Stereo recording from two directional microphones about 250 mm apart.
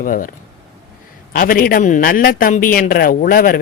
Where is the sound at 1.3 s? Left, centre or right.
Left.